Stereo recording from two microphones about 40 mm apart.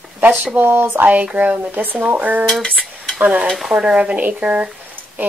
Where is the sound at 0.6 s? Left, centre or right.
Right.